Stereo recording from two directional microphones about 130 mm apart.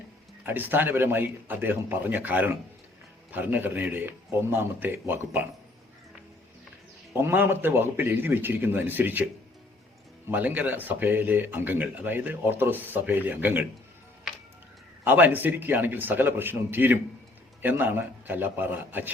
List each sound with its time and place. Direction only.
0.4 s speech: 15° right (ahead or behind)
7.1 s speech: 15° right (ahead or behind)
10.2 s speech: 15° right (ahead or behind)
15.0 s speech: 15° right (ahead or behind)